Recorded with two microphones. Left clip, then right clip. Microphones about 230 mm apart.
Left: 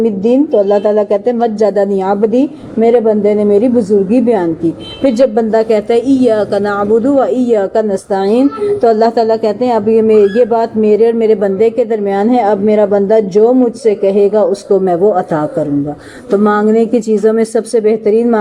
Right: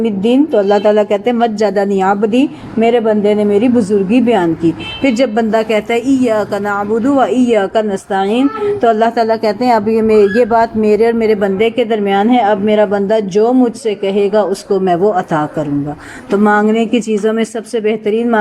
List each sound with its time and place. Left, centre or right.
0.0 s speech: right
10.8 s a man's voice: right
11.1 s speech: right